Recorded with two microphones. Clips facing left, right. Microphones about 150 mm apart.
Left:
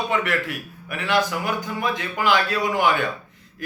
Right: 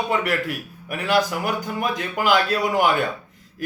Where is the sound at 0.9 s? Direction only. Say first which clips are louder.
Right 2 dB; 40° right (ahead or behind).